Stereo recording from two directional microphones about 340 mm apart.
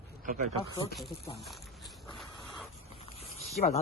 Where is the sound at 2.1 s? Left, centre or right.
Centre.